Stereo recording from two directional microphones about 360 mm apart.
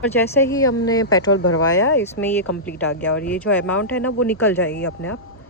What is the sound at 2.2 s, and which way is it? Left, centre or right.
Speech, centre.